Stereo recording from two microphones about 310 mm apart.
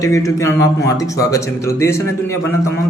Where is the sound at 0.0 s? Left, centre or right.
Centre.